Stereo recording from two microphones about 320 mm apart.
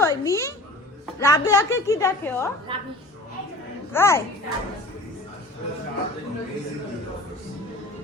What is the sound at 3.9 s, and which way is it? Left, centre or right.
Speech, centre.